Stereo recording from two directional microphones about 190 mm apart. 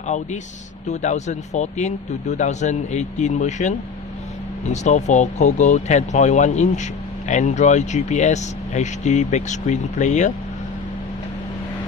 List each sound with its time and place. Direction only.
0.0 s speech: 40° left (ahead or behind)